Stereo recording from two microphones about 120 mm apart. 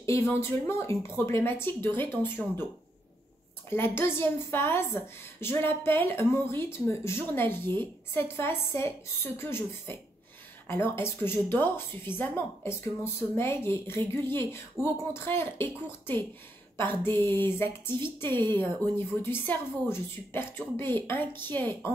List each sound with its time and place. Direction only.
0.0 s a woman's voice: 25° left (ahead or behind)
3.7 s a woman's voice: 20° left (ahead or behind)